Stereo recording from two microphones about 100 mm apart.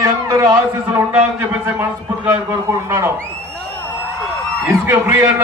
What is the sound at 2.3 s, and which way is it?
Speech, 25° right (ahead or behind).